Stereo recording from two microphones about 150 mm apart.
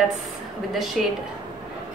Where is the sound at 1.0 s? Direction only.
5° right (ahead or behind).